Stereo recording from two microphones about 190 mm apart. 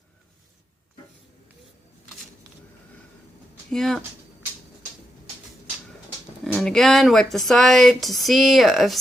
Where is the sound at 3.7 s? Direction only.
Centre (ahead or behind).